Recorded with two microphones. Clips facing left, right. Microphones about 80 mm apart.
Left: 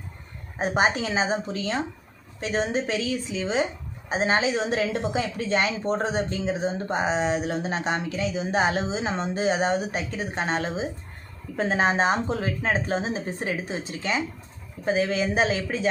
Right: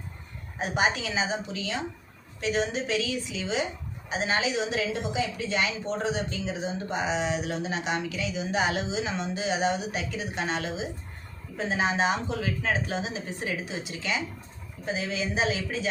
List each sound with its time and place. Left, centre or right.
0.6 s a woman's voice: left
11.5 s a woman's voice: left
14.8 s speech: left